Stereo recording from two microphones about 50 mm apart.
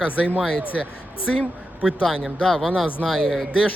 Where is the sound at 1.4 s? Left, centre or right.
Centre.